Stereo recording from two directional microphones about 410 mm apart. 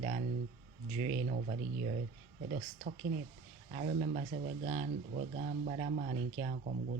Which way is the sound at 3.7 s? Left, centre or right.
Centre.